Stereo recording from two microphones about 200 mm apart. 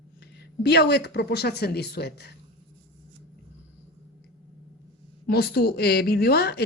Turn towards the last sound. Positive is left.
turn(degrees=55)  # may be behind; listen again after turning